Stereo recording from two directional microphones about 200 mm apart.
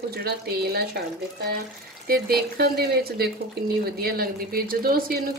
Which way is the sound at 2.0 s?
50° right (ahead or behind).